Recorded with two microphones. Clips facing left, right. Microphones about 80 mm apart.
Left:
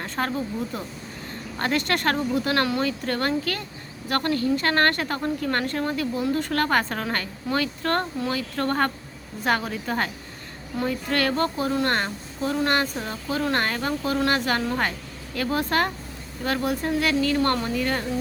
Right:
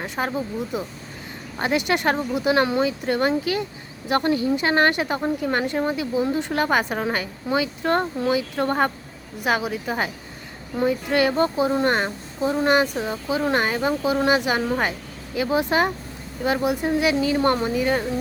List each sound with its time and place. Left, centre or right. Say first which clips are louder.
0.0 s speech: right 1 dB; centre